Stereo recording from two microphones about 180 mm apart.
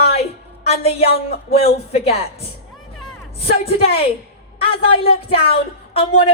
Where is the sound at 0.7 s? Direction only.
35° left (ahead or behind).